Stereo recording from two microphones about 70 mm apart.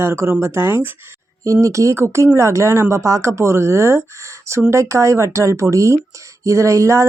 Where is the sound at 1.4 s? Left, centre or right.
Right.